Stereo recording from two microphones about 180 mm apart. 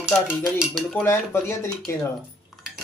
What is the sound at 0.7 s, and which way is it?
Speech, centre (ahead or behind).